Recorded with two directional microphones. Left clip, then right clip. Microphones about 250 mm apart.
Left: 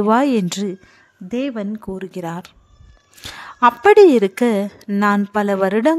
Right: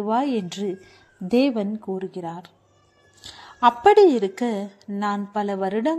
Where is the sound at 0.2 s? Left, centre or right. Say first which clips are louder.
Left 7 dB; left.